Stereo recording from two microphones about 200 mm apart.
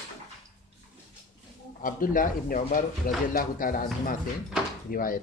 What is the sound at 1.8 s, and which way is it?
Speech, 45° left (ahead or behind).